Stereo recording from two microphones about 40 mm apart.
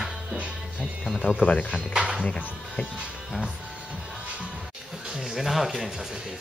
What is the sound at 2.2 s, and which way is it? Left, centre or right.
Speech, left.